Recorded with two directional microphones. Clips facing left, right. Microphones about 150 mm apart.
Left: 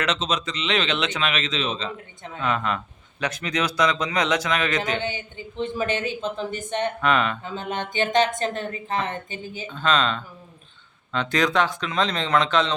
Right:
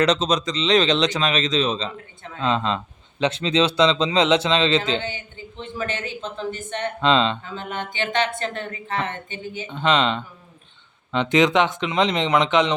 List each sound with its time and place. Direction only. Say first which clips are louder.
0.0 s speech: right 6 dB; 35° right (ahead or behind)
2.4 s speech: right 3 dB; 25° right (ahead or behind)
5.5 s speech: left 4 dB; 15° left (ahead or behind)
7.0 s speech: right 5 dB; 25° right (ahead or behind)
7.5 s a sound: left 1 dB; 20° left (ahead or behind)
7.9 s a woman's voice: left 3 dB; 45° left (ahead or behind)
9.6 s speech: right 2 dB; 20° right (ahead or behind)